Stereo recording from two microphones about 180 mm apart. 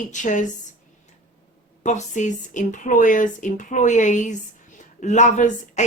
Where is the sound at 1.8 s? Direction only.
40° left (ahead or behind).